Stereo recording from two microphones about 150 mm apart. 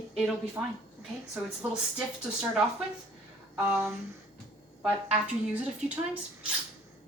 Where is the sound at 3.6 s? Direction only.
15° right (ahead or behind).